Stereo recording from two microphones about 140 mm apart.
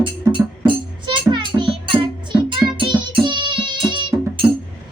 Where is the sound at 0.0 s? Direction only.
35° right (ahead or behind).